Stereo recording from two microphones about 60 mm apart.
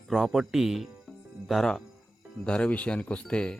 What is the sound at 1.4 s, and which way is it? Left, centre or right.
Speech, centre.